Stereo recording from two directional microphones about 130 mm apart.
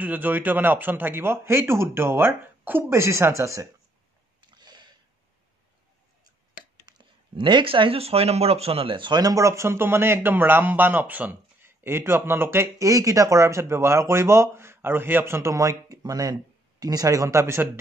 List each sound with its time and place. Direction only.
0.0 s speech: 15° right (ahead or behind)
4.5 s a sound: 35° right (ahead or behind)
6.9 s speech: 35° right (ahead or behind); by 17.6 s 20° right (ahead or behind)